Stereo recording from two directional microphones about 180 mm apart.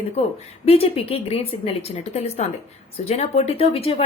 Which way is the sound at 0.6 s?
35° left (ahead or behind).